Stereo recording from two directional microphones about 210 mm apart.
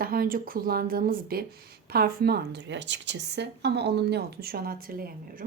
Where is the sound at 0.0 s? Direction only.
45° right (ahead or behind).